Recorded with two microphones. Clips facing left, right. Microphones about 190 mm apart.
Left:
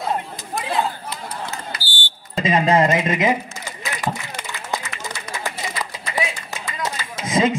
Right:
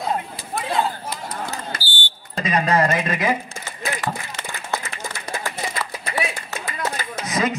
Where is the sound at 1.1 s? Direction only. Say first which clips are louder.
Right 1 dB; 45° right (ahead or behind).